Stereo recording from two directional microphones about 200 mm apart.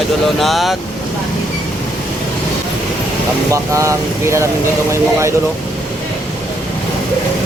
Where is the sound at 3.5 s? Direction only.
15° right (ahead or behind).